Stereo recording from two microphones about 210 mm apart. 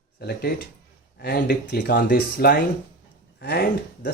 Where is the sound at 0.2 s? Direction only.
45° left (ahead or behind).